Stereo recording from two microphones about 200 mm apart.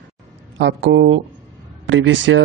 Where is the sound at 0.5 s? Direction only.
65° right (ahead or behind).